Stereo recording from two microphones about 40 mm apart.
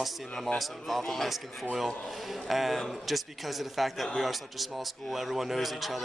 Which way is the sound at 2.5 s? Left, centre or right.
Centre.